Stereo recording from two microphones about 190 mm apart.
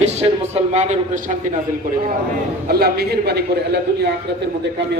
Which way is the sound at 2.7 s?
55° right (ahead or behind).